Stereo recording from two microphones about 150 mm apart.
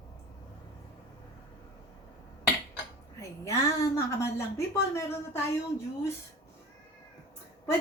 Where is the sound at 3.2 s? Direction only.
20° left (ahead or behind).